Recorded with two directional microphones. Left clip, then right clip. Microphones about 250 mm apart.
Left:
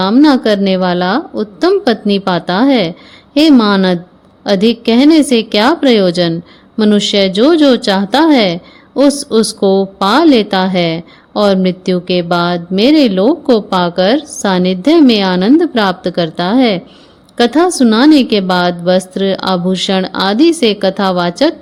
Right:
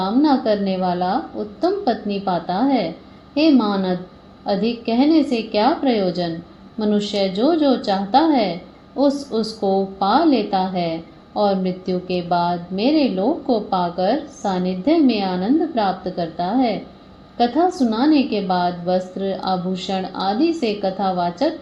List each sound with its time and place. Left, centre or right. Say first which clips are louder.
0.0 s a woman's voice: left 8 dB; left